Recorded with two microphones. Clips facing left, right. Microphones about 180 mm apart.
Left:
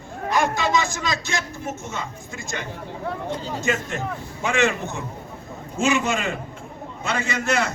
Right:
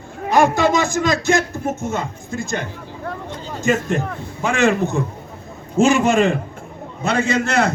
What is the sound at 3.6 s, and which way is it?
A man's voice, 45° right (ahead or behind).